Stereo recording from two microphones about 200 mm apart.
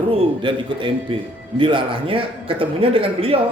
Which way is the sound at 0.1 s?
25° right (ahead or behind).